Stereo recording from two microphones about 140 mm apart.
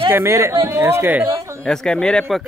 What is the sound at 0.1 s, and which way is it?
Speech, 20° right (ahead or behind).